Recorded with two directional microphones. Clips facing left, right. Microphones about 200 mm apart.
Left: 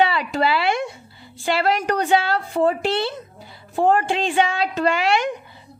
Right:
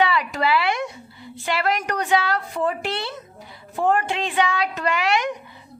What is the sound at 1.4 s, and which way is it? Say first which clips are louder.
A woman's voice: left 3 dB; 30° left (ahead or behind).